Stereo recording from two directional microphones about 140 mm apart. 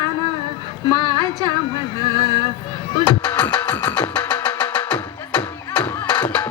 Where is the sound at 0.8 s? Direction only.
30° right (ahead or behind).